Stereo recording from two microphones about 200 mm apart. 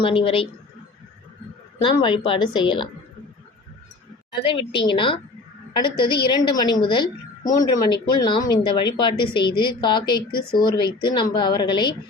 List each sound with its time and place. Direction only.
0.0 s a woman's voice: 25° left (ahead or behind)
1.8 s a woman's voice: 25° left (ahead or behind)
4.4 s a woman's voice: 25° left (ahead or behind)